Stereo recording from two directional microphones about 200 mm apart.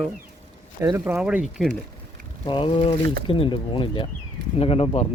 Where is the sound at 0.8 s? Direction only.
15° right (ahead or behind).